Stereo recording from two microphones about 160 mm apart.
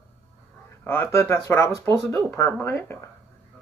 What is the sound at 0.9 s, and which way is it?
Speech, 15° left (ahead or behind).